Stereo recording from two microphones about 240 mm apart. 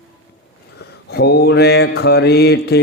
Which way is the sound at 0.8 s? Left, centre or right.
Left.